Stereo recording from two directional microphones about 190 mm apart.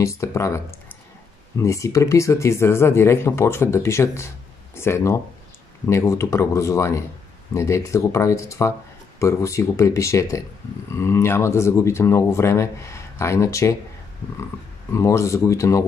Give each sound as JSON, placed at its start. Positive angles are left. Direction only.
{"t": 0.0, "sound": "speech", "side_deg": 15}
{"t": 1.6, "sound": "speech", "side_deg": 15}
{"t": 14.9, "sound": "speech", "side_deg": 15}